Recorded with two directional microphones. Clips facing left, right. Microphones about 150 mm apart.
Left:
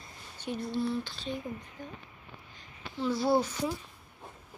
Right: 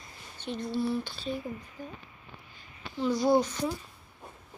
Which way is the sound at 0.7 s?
5° right (ahead or behind).